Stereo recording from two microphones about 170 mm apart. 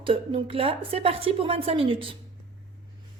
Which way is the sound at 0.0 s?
35° right (ahead or behind).